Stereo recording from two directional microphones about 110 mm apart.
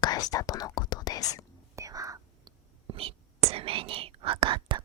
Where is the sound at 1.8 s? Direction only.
30° right (ahead or behind).